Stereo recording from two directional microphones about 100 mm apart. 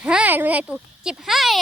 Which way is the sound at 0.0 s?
15° right (ahead or behind).